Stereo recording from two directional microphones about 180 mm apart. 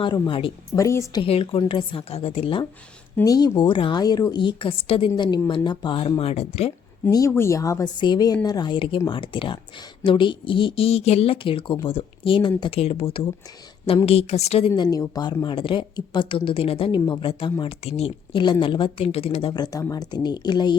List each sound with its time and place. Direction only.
0.0 s a woman's voice: 30° left (ahead or behind)
0.8 s a woman's voice: 15° left (ahead or behind)
1.2 s speech: 30° left (ahead or behind)
3.2 s a woman's voice: 20° left (ahead or behind); by 6.7 s 35° left (ahead or behind)
7.0 s a woman's voice: 15° left (ahead or behind); by 14.7 s 35° left (ahead or behind)
14.7 s a woman's voice: 20° left (ahead or behind)